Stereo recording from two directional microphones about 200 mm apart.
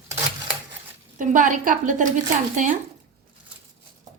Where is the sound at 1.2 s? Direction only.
40° right (ahead or behind).